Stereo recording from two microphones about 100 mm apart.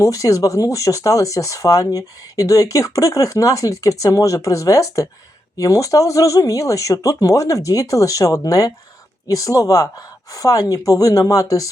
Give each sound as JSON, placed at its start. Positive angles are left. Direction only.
{"t": 0.0, "sound": "speech", "side_deg": 35}